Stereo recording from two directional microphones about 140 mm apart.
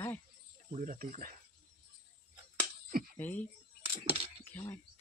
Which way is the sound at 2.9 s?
90° right.